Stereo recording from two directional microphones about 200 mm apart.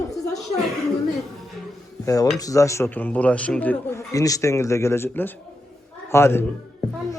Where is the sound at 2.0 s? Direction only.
15° left (ahead or behind).